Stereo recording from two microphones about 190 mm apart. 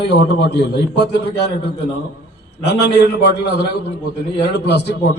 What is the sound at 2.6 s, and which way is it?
A man's voice, 65° left (ahead or behind).